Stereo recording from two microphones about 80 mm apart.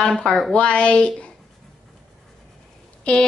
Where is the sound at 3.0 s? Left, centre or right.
Centre.